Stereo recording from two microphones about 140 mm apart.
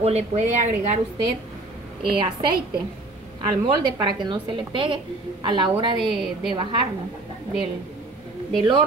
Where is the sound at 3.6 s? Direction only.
35° right (ahead or behind).